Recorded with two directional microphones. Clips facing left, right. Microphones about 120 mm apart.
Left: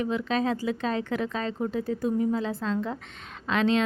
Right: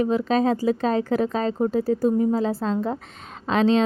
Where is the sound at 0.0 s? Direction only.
40° right (ahead or behind).